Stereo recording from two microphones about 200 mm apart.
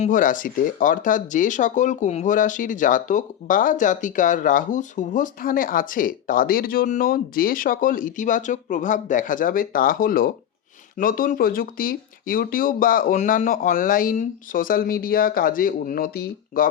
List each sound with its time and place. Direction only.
0.0 s speech: 40° left (ahead or behind)